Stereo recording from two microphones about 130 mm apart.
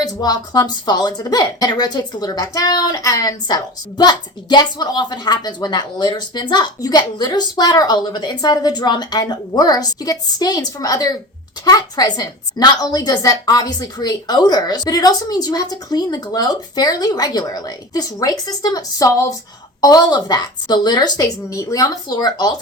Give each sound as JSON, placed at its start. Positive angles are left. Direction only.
{"t": 0.0, "sound": "speech", "side_deg": 30}